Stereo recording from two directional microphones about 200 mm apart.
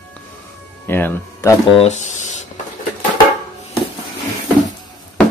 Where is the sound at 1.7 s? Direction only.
30° left (ahead or behind).